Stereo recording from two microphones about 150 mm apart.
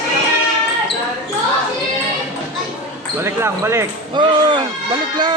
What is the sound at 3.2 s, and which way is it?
Speech, 15° right (ahead or behind).